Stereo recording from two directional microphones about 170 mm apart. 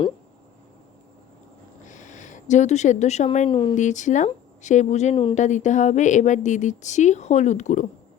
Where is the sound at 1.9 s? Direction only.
45° left (ahead or behind).